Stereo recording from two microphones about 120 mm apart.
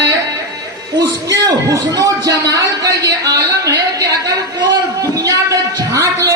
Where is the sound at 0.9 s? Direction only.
30° right (ahead or behind).